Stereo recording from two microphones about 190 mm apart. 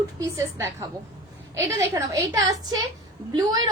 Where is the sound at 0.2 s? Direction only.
15° right (ahead or behind).